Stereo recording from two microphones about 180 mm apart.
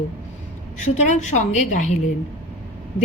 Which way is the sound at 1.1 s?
40° left (ahead or behind).